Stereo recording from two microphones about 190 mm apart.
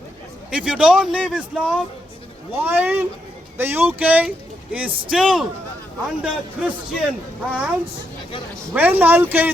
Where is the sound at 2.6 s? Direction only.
10° right (ahead or behind).